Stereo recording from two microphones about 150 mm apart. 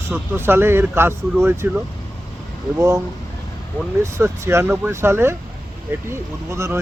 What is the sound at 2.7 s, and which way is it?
Speech, 20° right (ahead or behind).